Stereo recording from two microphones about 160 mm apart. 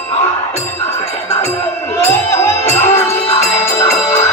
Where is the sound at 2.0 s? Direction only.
15° left (ahead or behind).